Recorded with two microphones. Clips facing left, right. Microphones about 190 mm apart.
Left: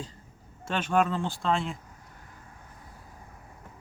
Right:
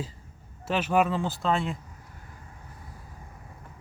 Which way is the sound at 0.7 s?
5° right (ahead or behind).